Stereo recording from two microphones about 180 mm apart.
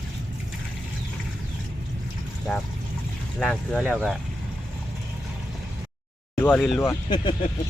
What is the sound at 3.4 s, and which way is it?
Speech, centre (ahead or behind).